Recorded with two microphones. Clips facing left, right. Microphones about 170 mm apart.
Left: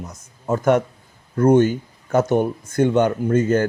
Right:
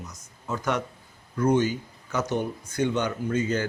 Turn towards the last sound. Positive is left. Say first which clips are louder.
# left 8 dB
turn(degrees=50)  # may be behind; listen again after turning